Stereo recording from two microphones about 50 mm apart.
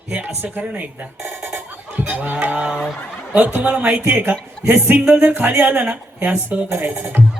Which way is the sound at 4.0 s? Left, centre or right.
Right.